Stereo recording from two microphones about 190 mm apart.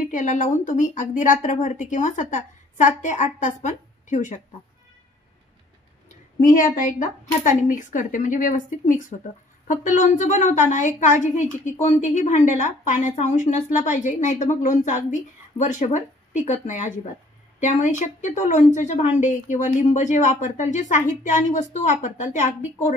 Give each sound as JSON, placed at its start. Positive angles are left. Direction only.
{"t": 0.0, "sound": "a woman's voice", "side_deg": 40}
{"t": 6.0, "sound": "a woman's voice", "side_deg": 45}